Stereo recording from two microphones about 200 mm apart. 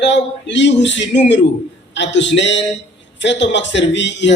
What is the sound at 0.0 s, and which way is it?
A man's voice, 65° left (ahead or behind).